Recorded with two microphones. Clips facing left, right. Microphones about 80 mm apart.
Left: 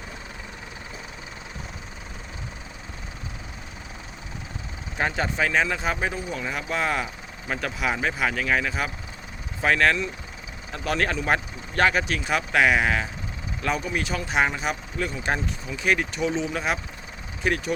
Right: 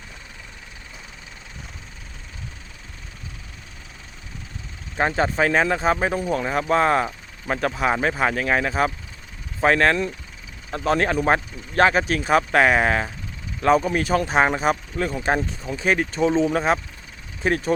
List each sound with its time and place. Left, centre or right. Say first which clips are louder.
4.9 s speech: right 5 dB; right